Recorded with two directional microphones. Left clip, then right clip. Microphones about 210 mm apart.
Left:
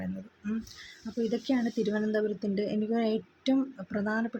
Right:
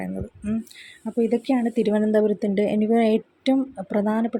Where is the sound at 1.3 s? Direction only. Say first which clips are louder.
Right 8 dB; 25° right (ahead or behind).